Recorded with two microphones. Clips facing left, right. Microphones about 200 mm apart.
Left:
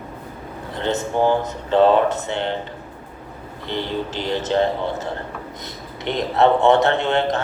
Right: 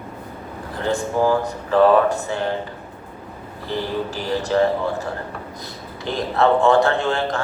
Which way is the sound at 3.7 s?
25° left (ahead or behind).